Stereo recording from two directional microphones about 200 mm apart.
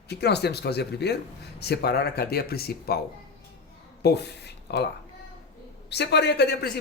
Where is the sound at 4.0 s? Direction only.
55° left (ahead or behind).